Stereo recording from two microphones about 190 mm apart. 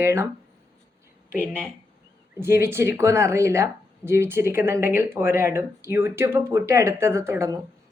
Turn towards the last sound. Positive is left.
turn(degrees=-15)  # may be behind; listen again after turning